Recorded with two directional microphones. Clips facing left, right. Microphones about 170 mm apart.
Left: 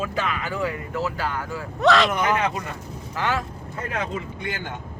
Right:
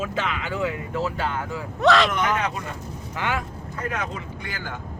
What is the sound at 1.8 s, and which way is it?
Speech, centre (ahead or behind).